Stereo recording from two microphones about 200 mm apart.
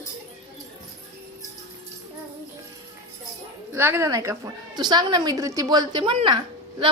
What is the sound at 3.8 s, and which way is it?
Speech, 10° right (ahead or behind).